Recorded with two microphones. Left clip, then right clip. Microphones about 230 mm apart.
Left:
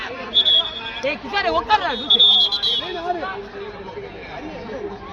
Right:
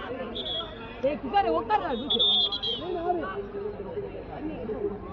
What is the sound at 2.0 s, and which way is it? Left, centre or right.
Speech, left.